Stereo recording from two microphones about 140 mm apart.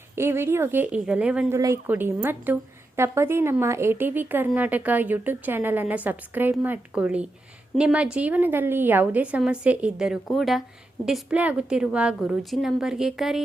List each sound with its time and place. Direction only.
0.2 s a woman's voice: 20° right (ahead or behind)
1.5 s a woman's voice: 20° right (ahead or behind); by 13.4 s centre (ahead or behind)